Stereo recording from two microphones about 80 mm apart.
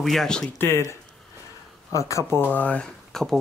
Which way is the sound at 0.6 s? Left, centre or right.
Left.